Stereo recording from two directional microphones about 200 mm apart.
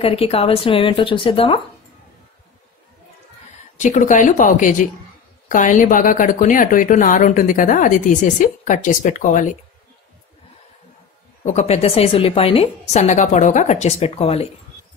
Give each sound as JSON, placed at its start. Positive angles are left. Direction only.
{"t": 0.0, "sound": "speech", "side_deg": 30}
{"t": 3.7, "sound": "a woman's voice", "side_deg": 40}
{"t": 11.4, "sound": "a woman's voice", "side_deg": 35}